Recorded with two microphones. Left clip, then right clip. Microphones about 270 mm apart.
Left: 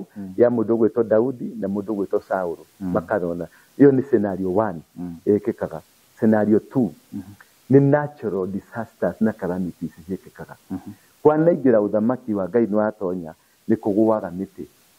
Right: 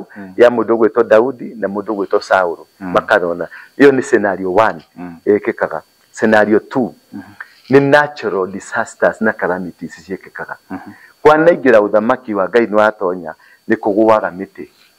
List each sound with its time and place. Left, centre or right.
0.1 s speech: centre